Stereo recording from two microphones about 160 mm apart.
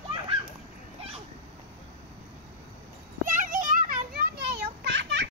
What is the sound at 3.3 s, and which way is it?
Children playing, 55° right (ahead or behind).